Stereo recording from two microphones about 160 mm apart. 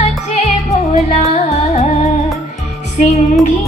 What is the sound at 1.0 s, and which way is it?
Music, 45° left (ahead or behind).